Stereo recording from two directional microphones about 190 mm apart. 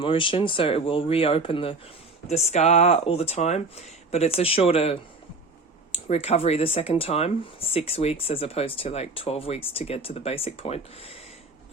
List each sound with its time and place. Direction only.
0.0 s speech: 25° left (ahead or behind)